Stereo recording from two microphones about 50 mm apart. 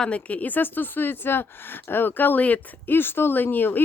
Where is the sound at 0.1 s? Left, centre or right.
Left.